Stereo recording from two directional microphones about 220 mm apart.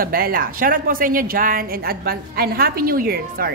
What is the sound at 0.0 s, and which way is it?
A woman's voice, 40° right (ahead or behind).